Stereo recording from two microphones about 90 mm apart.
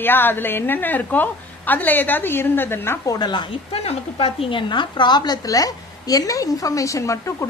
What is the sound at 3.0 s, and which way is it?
Speech, 40° left (ahead or behind).